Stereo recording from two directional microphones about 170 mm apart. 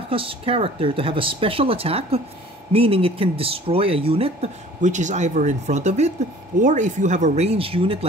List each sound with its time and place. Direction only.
0.1 s speech: 30° right (ahead or behind)